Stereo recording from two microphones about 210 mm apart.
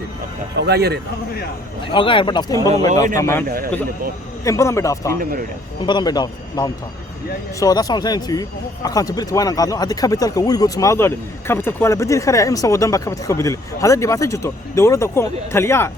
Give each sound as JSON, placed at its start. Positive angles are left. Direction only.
{"t": 0.5, "sound": "speech", "side_deg": -50}
{"t": 1.9, "sound": "a man's voice", "side_deg": 25}
{"t": 4.4, "sound": "speech", "side_deg": 15}
{"t": 5.2, "sound": "speech", "side_deg": -45}
{"t": 5.8, "sound": "a man's voice", "side_deg": 20}